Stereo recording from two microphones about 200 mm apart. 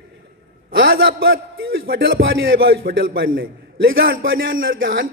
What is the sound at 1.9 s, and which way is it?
Speech, 70° right (ahead or behind).